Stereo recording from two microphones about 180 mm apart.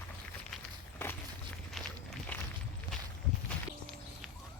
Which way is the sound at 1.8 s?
Centre (ahead or behind).